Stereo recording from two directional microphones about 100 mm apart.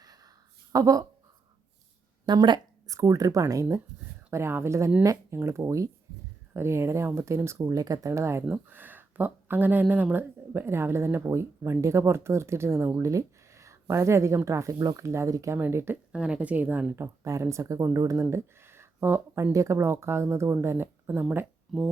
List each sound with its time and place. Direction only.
0.0 s a sound: 40° right (ahead or behind)
0.7 s speech: 35° right (ahead or behind)
2.2 s speech: 50° right (ahead or behind); by 16.0 s 25° right (ahead or behind)
16.1 s speech: 10° right (ahead or behind)
21.7 s speech: centre (ahead or behind)